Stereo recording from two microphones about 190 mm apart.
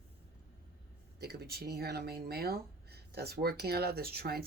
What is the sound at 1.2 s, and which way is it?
Speech, 55° right (ahead or behind).